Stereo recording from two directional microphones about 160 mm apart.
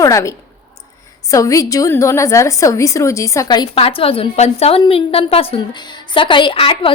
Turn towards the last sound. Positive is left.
turn(degrees=35)  # may be behind; listen again after turning